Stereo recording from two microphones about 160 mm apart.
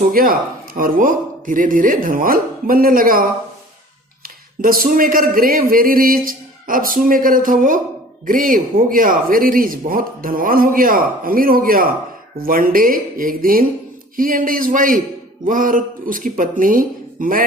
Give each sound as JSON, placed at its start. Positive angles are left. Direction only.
{"t": 0.0, "sound": "speech", "side_deg": -65}
{"t": 4.6, "sound": "speech", "side_deg": -60}